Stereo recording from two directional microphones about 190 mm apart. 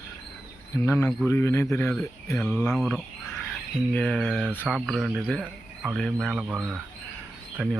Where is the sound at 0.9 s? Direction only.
15° left (ahead or behind).